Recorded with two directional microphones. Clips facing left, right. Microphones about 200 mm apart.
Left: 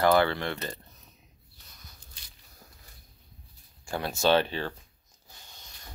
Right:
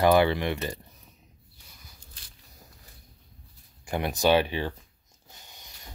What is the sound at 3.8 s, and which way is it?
Speech, 20° right (ahead or behind).